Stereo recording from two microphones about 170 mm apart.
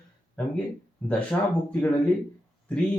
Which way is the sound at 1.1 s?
5° left (ahead or behind).